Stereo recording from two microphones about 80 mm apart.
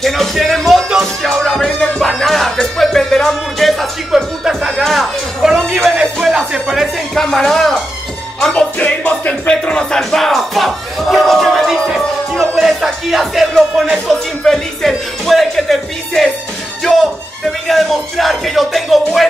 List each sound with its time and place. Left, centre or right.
0.0 s music: centre
9.3 s speech: centre